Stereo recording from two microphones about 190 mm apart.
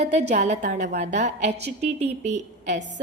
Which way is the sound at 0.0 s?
35° right (ahead or behind).